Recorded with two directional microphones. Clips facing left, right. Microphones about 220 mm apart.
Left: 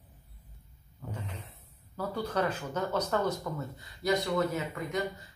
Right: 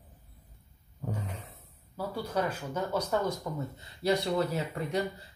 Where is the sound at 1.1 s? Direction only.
45° right (ahead or behind).